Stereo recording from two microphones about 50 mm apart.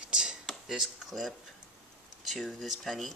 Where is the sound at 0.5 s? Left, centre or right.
Centre.